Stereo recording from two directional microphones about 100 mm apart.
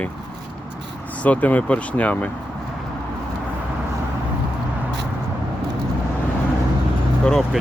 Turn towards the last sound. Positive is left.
turn(degrees=5)  # may be behind; listen again after turning